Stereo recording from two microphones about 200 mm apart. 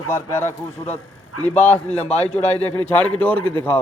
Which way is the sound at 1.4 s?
90° left.